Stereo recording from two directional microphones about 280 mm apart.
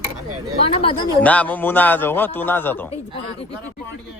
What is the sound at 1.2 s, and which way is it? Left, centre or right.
A man's voice, centre.